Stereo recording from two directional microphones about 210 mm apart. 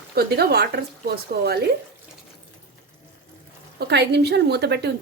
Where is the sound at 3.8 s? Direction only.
50° right (ahead or behind).